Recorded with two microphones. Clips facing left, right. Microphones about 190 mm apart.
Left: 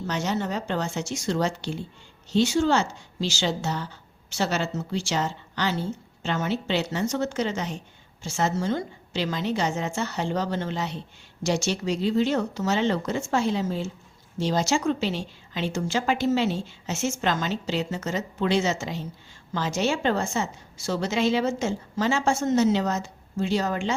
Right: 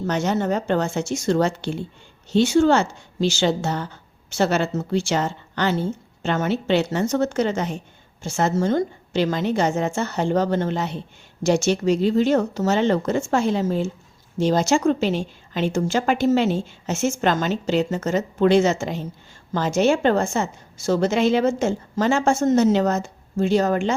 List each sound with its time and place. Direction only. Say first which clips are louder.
0.1 s a woman's voice: right 6 dB; 50° right (ahead or behind)